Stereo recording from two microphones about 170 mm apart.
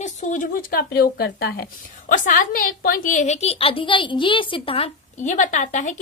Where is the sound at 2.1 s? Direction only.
55° left (ahead or behind).